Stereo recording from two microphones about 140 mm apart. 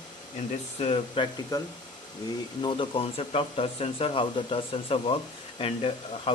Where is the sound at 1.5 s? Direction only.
25° left (ahead or behind).